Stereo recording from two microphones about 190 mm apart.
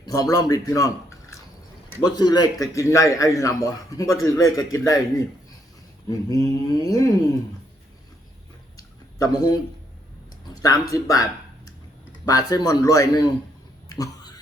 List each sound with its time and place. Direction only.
0.0 s a man's voice: 20° left (ahead or behind)
9.1 s speech: 20° left (ahead or behind)
10.6 s a man's voice: 20° left (ahead or behind)
13.9 s a sound: 20° left (ahead or behind)